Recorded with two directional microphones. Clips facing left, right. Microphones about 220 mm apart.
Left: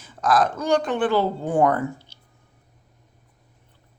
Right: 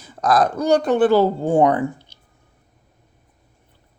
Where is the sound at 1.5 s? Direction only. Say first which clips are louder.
Right 2 dB; 20° right (ahead or behind).